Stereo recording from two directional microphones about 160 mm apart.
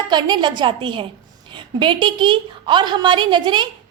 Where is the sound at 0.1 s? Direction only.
30° right (ahead or behind).